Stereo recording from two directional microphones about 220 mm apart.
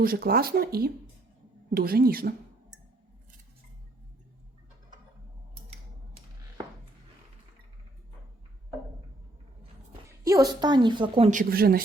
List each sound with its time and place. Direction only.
0.0 s speech: 40° right (ahead or behind)
10.1 s a woman's voice: 15° right (ahead or behind)
11.3 s speech: 40° right (ahead or behind)